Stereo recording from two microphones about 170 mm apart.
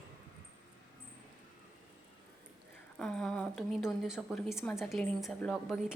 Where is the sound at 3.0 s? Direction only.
5° left (ahead or behind).